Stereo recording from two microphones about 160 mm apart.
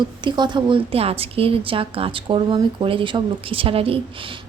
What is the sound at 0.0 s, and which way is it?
A woman's voice, 30° right (ahead or behind).